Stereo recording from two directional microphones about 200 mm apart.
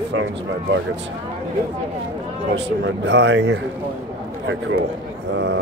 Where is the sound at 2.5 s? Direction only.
60° right (ahead or behind).